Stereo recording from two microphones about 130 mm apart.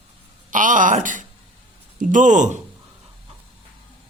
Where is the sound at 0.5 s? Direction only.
90° right; by 2.6 s 70° right (ahead or behind).